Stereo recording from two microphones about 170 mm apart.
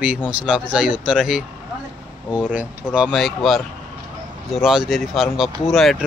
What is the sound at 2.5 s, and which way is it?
Speech, 10° right (ahead or behind).